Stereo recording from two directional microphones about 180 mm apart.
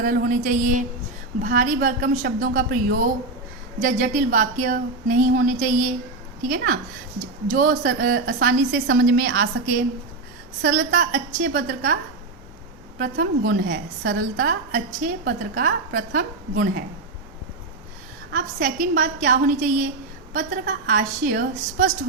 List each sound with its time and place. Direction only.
0.0 s a woman's voice: 45° right (ahead or behind)
7.4 s a woman's voice: 50° right (ahead or behind)
13.0 s a woman's voice: 50° right (ahead or behind)
18.3 s a woman's voice: 55° right (ahead or behind)